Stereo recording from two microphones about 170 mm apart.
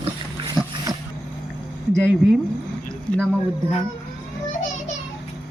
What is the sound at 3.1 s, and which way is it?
Speech, 5° left (ahead or behind).